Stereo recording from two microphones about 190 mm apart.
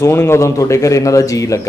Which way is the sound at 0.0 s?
15° left (ahead or behind).